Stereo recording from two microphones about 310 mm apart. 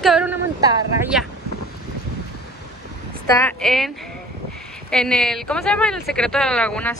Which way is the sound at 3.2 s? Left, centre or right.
Centre.